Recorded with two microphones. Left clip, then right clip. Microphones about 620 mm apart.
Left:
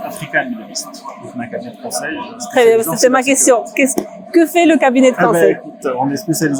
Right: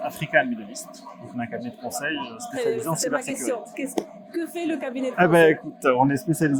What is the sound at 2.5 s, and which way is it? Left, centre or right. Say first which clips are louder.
Speech: left 16 dB; left.